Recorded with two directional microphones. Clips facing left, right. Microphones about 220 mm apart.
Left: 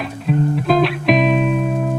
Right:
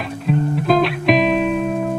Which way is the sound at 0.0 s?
Centre (ahead or behind).